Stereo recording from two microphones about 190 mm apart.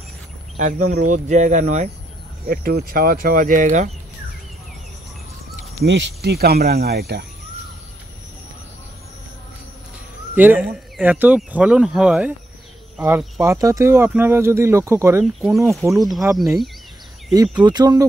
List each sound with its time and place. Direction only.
0.6 s speech: 45° right (ahead or behind)
2.4 s speech: 50° right (ahead or behind)
5.9 s speech: 70° right (ahead or behind); by 7.2 s 55° right (ahead or behind)
10.3 s speech: 10° right (ahead or behind)
13.4 s speech: 15° right (ahead or behind)
15.2 s speech: 5° right (ahead or behind)
17.3 s speech: 20° right (ahead or behind)